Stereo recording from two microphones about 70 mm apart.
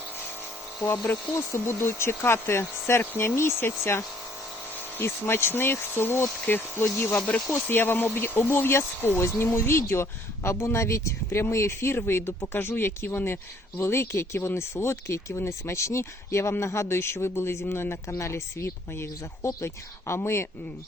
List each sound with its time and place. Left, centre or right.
1.1 s speech: left
1.5 s speech: left